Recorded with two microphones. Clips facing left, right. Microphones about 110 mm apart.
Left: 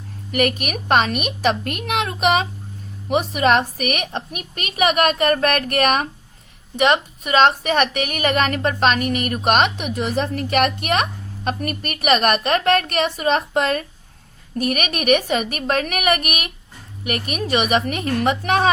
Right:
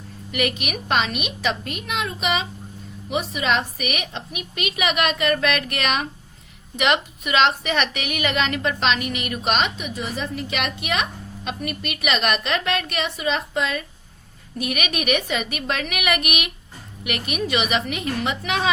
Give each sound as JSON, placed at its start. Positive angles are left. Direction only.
{"t": 0.3, "sound": "a woman's voice", "side_deg": 50}
{"t": 6.7, "sound": "a woman's voice", "side_deg": 35}
{"t": 14.6, "sound": "a woman's voice", "side_deg": 45}